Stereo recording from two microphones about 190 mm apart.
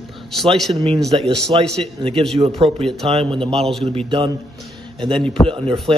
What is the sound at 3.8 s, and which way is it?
Speech, 30° right (ahead or behind).